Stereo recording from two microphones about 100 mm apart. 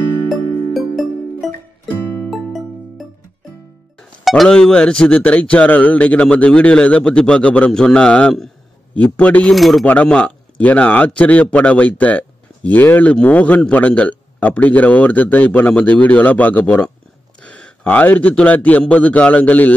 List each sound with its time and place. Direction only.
0.3 s music: centre (ahead or behind)
4.2 s speech: centre (ahead or behind)
9.5 s speech: centre (ahead or behind)
9.8 s a man's voice: 10° left (ahead or behind)